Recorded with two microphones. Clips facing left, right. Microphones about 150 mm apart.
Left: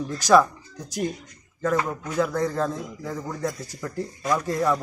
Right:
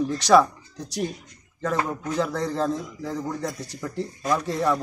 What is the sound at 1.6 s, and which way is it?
A man's voice, 5° left (ahead or behind).